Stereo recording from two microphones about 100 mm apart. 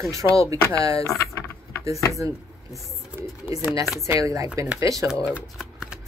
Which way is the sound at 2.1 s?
30° right (ahead or behind).